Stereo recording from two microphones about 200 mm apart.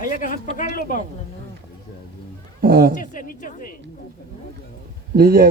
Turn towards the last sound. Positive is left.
turn(degrees=-50)  # may be behind; listen again after turning